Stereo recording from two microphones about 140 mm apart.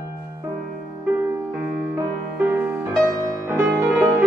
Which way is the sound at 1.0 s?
15° right (ahead or behind).